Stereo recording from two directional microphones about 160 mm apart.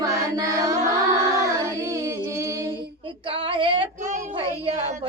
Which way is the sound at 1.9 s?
20° right (ahead or behind).